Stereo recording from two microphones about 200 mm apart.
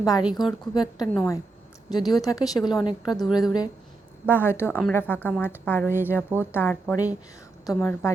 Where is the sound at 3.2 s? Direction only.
Centre (ahead or behind).